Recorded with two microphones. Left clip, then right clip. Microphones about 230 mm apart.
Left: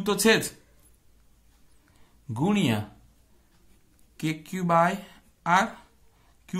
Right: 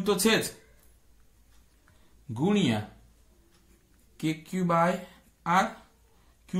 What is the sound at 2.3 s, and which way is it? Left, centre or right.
Speech, left.